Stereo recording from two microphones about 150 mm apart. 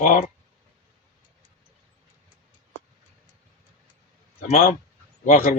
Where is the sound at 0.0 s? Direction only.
50° left (ahead or behind).